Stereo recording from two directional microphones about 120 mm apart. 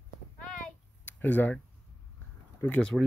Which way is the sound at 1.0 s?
15° left (ahead or behind).